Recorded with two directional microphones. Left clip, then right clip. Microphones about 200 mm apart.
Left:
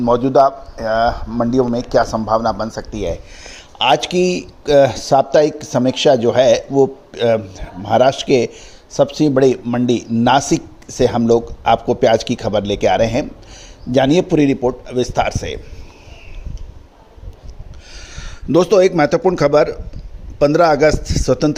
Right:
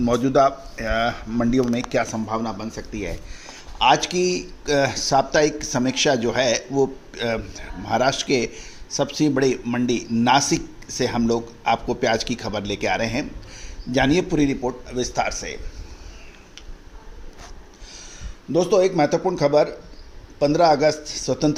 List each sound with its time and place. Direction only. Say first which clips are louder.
0.1 s speech: left 6 dB; 20° right (ahead or behind)
2.1 s speech: left 11 dB; 30° left (ahead or behind)
17.9 s a man's voice: left 7 dB; 45° left (ahead or behind)